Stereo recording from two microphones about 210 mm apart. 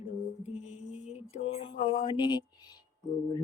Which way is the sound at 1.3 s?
25° left (ahead or behind).